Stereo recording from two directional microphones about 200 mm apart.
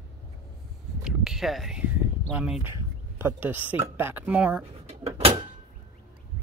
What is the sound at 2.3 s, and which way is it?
Speech, 5° right (ahead or behind).